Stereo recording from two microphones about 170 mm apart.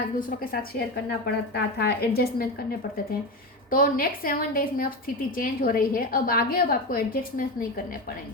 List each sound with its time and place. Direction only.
0.2 s a woman's voice: 55° left (ahead or behind)
1.5 s a woman's voice: 65° left (ahead or behind)